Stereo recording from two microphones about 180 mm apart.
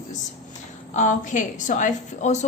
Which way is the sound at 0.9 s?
45° left (ahead or behind).